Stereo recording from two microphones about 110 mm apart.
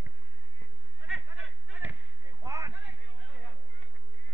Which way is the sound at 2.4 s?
35° right (ahead or behind).